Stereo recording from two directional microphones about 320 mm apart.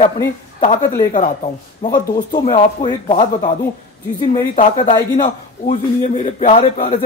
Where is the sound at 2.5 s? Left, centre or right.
Centre.